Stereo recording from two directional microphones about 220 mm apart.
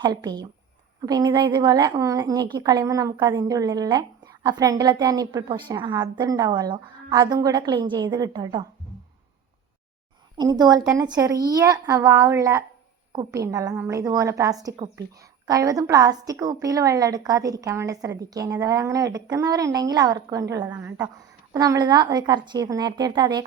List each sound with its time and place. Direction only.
0.0 s a woman's voice: 20° right (ahead or behind)
10.3 s a woman's voice: 20° right (ahead or behind)